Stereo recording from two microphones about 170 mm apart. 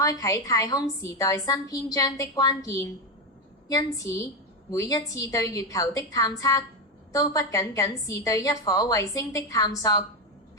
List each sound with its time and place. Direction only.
0.0 s a woman's voice: 20° left (ahead or behind)